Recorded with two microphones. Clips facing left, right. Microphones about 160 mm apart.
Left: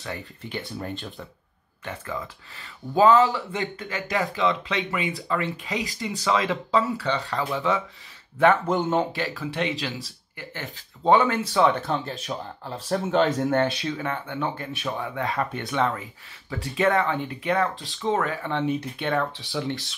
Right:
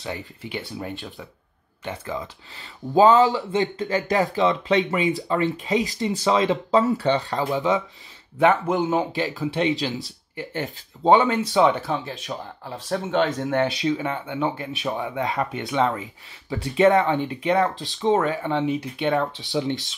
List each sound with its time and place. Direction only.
0.0 s speech: 20° right (ahead or behind)
0.7 s speech: centre (ahead or behind)
1.9 s speech: 20° right (ahead or behind)
3.8 s speech: 40° right (ahead or behind)
5.0 s speech: 25° right (ahead or behind)
6.7 s speech: 45° right (ahead or behind)
7.4 s speech: 20° right (ahead or behind)
8.6 s speech: centre (ahead or behind)
9.1 s speech: 20° right (ahead or behind)
11.8 s speech: centre (ahead or behind)
13.7 s speech: 20° right (ahead or behind)